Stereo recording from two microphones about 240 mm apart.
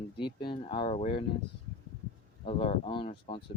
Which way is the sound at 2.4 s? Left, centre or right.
Left.